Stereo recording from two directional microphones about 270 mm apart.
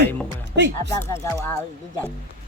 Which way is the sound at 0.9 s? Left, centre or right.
Centre.